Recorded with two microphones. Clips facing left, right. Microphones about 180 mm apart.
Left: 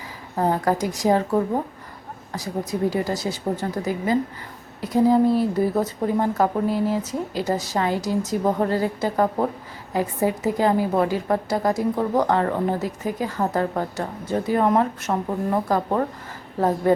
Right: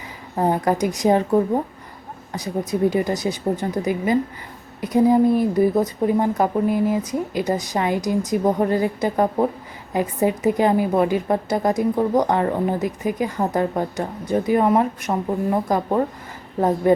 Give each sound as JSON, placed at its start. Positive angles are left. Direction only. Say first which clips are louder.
{"t": 0.3, "sound": "speech", "louder": "right 2 dB", "side_deg": -20}
{"t": 2.3, "sound": "a woman's voice", "louder": "right 3 dB", "side_deg": -20}